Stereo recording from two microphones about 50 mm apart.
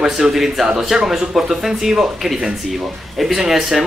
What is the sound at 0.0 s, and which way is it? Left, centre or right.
Speech, centre.